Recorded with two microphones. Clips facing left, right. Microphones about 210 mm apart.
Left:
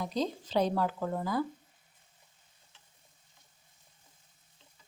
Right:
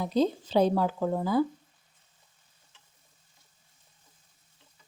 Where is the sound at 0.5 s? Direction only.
25° right (ahead or behind).